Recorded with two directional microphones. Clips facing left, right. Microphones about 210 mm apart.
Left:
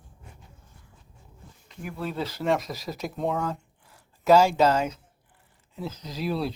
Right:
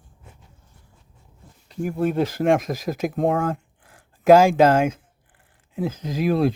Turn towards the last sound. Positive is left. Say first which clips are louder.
# right 8 dB
turn(degrees=-50)  # may be behind; listen again after turning